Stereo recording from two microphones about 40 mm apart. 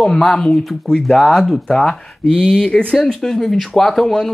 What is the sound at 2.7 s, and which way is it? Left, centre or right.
Speech, left.